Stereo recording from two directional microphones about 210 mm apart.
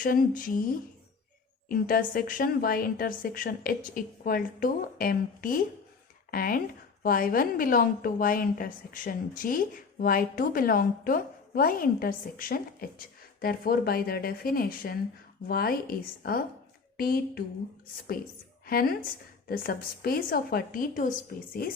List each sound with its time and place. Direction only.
0.0 s a woman's voice: 40° left (ahead or behind)
18.6 s a woman's voice: 45° left (ahead or behind)